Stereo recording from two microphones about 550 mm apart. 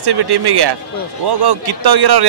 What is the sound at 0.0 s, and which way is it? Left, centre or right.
A man's voice, right.